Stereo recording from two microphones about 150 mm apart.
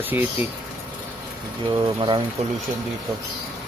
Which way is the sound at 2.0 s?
30° right (ahead or behind).